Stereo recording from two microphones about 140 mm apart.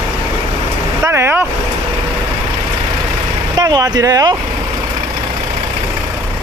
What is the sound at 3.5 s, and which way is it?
Speech, 25° right (ahead or behind).